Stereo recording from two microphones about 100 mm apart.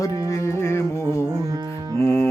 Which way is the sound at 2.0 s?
25° left (ahead or behind).